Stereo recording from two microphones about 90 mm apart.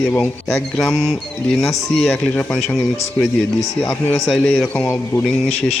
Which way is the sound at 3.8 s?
15° left (ahead or behind).